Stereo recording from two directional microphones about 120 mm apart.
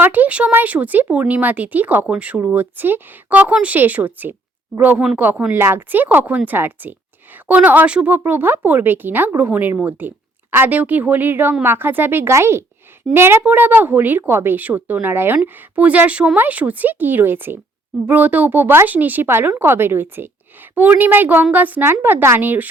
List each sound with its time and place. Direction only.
0.0 s speech: 15° right (ahead or behind)